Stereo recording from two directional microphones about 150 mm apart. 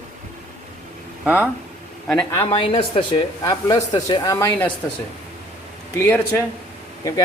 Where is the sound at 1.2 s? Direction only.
10° right (ahead or behind).